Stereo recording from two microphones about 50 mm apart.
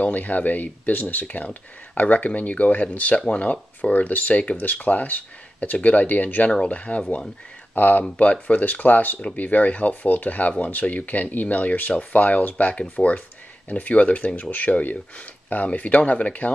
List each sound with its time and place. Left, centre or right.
0.0 s speech: left